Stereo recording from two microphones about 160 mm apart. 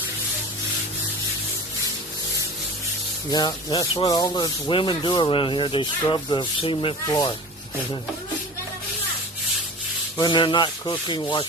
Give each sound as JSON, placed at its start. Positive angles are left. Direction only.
{"t": 3.2, "sound": "rub", "side_deg": 25}
{"t": 10.2, "sound": "rub", "side_deg": 30}